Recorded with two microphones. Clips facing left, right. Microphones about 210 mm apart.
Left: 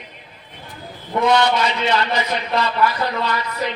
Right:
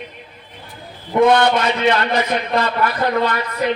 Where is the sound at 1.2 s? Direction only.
55° right (ahead or behind).